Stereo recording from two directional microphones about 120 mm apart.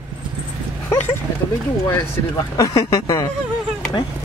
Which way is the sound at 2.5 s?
30° left (ahead or behind).